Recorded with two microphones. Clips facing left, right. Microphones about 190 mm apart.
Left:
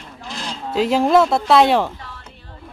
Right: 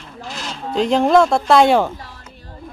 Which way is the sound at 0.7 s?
5° left (ahead or behind).